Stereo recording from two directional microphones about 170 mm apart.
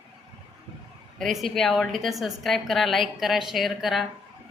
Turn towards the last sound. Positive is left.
turn(degrees=0)  # may be behind; listen again after turning